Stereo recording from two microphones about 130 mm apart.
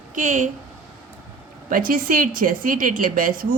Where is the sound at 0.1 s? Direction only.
85° right.